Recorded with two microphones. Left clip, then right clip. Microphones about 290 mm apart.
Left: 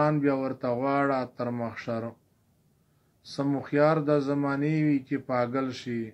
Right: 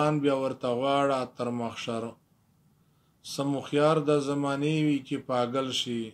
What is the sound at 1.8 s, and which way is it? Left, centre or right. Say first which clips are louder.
Speech: left 1 dB; centre.